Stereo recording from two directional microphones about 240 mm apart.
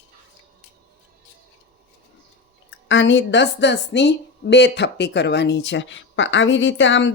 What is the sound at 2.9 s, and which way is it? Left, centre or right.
A woman's voice, left.